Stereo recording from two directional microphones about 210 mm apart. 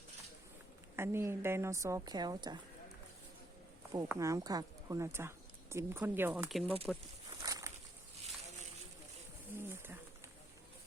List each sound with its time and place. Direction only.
0.9 s speech: 10° right (ahead or behind)
3.9 s speech: 15° right (ahead or behind)
7.3 s a sound: 15° right (ahead or behind)
9.6 s wild animals: 10° right (ahead or behind)